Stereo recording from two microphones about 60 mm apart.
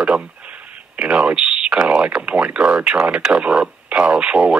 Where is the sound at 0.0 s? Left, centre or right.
Centre.